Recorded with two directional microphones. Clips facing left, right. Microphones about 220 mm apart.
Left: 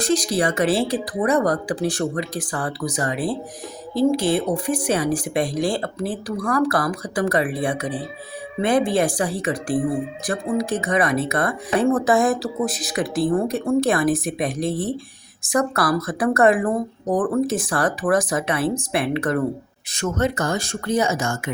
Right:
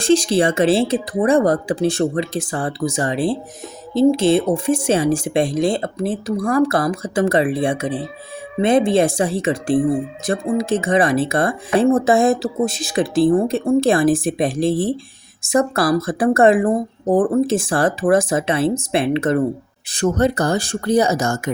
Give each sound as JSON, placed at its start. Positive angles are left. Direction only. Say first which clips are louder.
{"t": 0.0, "sound": "speech", "louder": "right 5 dB", "side_deg": -25}